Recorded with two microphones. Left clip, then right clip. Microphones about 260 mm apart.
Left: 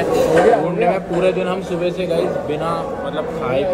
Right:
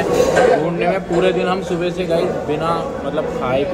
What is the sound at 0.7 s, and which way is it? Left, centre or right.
Speech, centre.